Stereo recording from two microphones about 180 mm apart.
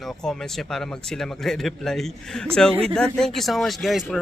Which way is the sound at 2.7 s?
30° right (ahead or behind).